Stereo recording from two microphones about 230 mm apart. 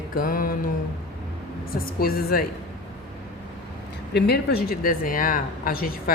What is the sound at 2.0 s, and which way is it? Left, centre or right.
Speech, left.